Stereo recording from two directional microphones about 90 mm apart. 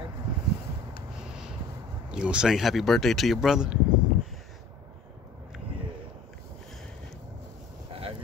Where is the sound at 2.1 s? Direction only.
10° right (ahead or behind).